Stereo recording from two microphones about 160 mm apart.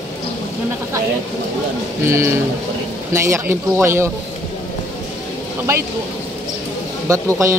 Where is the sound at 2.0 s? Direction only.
15° right (ahead or behind).